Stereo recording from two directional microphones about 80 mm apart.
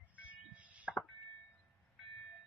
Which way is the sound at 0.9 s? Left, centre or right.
Centre.